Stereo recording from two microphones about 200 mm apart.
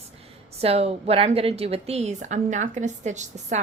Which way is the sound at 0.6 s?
30° right (ahead or behind).